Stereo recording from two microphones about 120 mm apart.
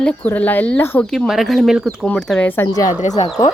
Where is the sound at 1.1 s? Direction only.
Centre (ahead or behind).